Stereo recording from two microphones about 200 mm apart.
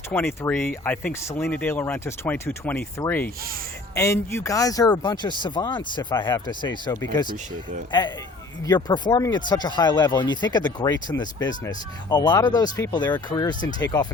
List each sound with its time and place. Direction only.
0.1 s speech: 10° left (ahead or behind)
8.6 s speech: 20° left (ahead or behind)